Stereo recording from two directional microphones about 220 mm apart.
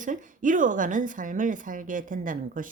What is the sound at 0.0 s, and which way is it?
A woman's voice, 35° right (ahead or behind).